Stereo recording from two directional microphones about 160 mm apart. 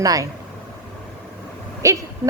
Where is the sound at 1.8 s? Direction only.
20° right (ahead or behind).